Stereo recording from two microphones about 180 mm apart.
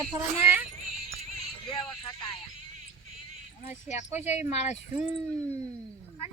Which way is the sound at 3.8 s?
40° left (ahead or behind).